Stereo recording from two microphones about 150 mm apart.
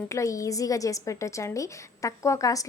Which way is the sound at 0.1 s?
20° left (ahead or behind).